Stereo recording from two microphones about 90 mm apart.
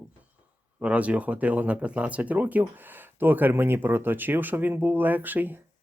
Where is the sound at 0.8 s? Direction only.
15° right (ahead or behind).